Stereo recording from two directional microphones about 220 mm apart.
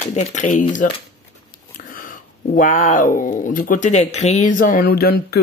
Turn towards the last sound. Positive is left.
turn(degrees=45)  # may be behind; listen again after turning